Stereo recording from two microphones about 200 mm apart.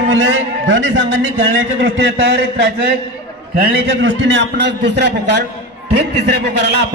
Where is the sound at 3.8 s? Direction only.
65° right (ahead or behind).